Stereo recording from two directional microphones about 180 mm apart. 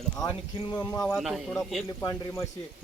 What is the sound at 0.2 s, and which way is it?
Speech, 25° left (ahead or behind).